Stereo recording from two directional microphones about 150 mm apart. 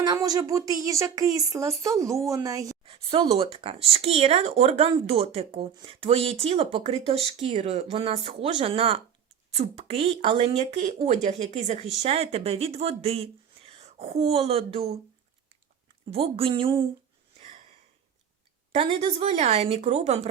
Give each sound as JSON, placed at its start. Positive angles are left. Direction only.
{"t": 0.0, "sound": "speech", "side_deg": -25}
{"t": 2.8, "sound": "speech", "side_deg": -40}
{"t": 16.0, "sound": "speech", "side_deg": -40}
{"t": 18.7, "sound": "speech", "side_deg": -40}